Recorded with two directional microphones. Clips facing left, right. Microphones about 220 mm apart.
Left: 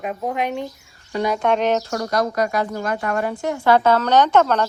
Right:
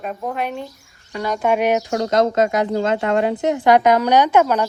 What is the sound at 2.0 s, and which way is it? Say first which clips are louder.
A woman's voice: right 4 dB; 25° right (ahead or behind).